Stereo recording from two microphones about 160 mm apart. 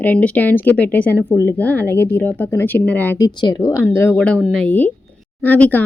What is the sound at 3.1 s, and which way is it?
Speech, 25° left (ahead or behind).